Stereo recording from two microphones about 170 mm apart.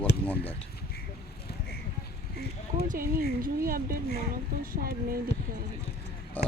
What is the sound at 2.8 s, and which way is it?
Speech, 55° right (ahead or behind).